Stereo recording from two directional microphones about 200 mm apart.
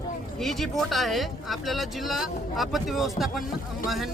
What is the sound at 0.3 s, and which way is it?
Speech, centre (ahead or behind).